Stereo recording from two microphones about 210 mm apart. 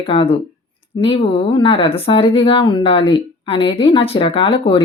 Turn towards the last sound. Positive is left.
turn(degrees=25)  # may be behind; listen again after turning